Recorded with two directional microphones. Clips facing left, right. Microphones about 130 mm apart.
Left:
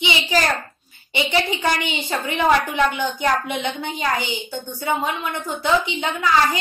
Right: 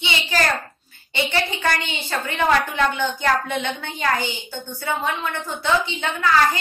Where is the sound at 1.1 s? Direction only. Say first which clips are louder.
Left 2 dB; 15° left (ahead or behind).